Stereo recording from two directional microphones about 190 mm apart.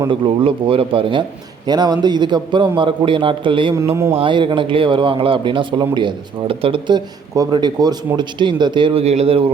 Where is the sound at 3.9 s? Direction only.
15° right (ahead or behind).